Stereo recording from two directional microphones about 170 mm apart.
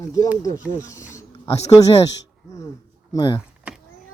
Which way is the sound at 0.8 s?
20° left (ahead or behind).